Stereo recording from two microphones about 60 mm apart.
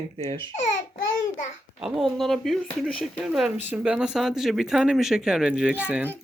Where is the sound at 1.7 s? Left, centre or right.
Centre.